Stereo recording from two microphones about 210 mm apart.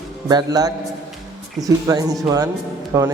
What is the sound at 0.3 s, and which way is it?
A man's voice, 20° right (ahead or behind).